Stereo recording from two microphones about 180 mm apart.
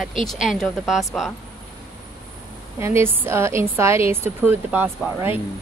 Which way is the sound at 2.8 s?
15° right (ahead or behind).